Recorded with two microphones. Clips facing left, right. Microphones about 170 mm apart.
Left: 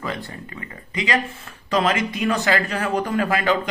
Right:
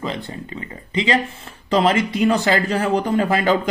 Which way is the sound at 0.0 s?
25° right (ahead or behind).